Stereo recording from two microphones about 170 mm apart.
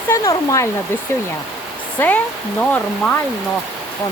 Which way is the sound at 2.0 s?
15° left (ahead or behind).